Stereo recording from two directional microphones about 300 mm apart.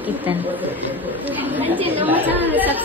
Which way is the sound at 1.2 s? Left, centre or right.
Centre.